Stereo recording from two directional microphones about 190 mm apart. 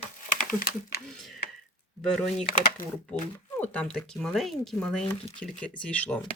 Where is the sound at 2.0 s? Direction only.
5° left (ahead or behind).